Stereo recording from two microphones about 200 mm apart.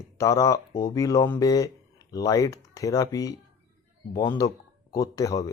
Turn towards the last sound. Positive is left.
turn(degrees=15)  # may be behind; listen again after turning